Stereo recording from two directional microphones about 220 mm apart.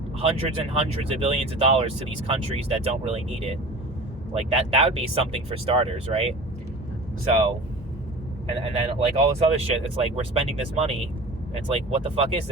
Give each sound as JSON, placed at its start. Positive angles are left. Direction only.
{"t": 0.2, "sound": "speech", "side_deg": -25}
{"t": 8.6, "sound": "speech", "side_deg": -30}